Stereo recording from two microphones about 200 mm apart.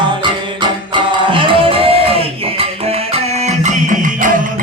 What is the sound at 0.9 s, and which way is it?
Music, 25° right (ahead or behind).